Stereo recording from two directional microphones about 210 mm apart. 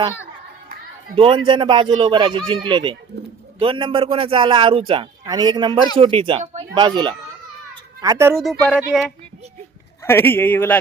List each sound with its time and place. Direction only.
1.1 s speech: 25° right (ahead or behind)
8.4 s speech: centre (ahead or behind)
10.0 s a man's voice: 10° left (ahead or behind)